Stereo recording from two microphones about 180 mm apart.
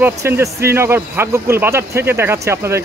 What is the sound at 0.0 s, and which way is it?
A man's voice, 15° right (ahead or behind).